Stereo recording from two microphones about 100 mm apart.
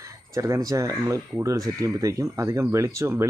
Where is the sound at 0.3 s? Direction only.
30° right (ahead or behind).